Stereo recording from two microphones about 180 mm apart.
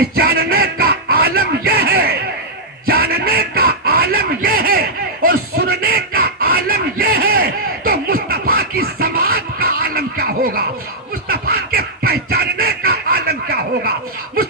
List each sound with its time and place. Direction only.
0.0 s music: 60° right (ahead or behind)
2.8 s a sound: 60° right (ahead or behind)
11.3 s music: 60° right (ahead or behind)